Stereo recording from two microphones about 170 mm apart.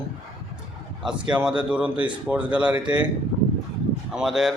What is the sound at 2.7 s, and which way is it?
Speech, 25° right (ahead or behind).